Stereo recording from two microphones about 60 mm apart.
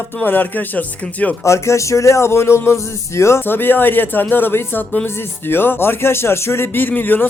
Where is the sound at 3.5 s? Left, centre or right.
Left.